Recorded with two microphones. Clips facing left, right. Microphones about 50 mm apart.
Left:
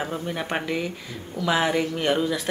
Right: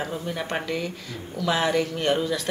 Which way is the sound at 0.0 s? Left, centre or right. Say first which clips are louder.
Left 1 dB; centre.